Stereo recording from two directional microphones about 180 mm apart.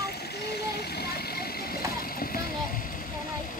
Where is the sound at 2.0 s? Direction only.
55° left (ahead or behind).